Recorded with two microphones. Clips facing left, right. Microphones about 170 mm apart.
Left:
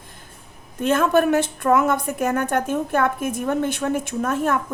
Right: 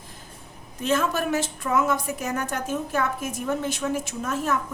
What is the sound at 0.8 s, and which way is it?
A woman's voice, 55° left (ahead or behind).